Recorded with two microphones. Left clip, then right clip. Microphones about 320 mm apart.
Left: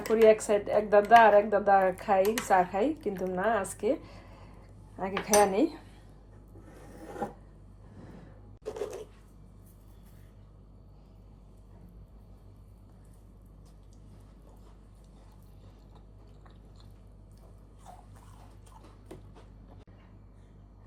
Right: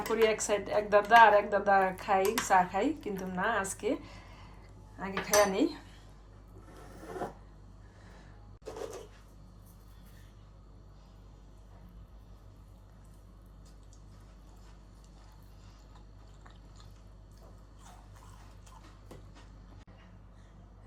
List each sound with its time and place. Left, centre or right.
0.1 s speech: centre